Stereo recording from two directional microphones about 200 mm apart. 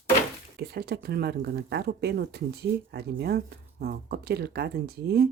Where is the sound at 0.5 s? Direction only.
55° right (ahead or behind).